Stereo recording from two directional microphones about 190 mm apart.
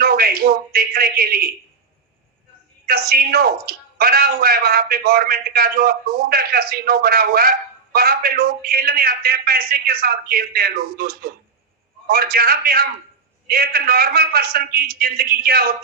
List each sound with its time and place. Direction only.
0.0 s a man's voice: 50° right (ahead or behind)
2.8 s a woman's voice: 55° right (ahead or behind)